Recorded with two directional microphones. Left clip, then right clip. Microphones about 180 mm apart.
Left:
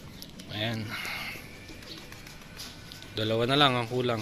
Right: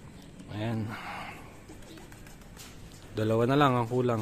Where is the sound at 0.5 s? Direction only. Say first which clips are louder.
Left 3 dB; 25° right (ahead or behind).